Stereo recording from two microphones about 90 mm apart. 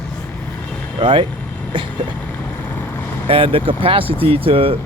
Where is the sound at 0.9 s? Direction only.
70° right (ahead or behind).